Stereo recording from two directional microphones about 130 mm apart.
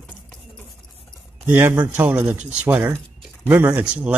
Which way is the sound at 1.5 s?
15° right (ahead or behind).